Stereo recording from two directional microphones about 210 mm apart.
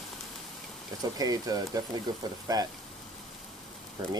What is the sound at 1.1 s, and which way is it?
Speech, 15° right (ahead or behind).